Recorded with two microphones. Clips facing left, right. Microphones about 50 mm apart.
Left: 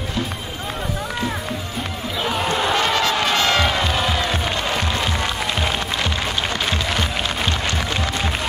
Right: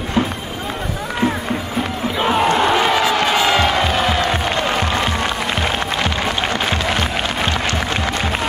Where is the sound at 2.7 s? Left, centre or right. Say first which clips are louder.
Right 4 dB; centre.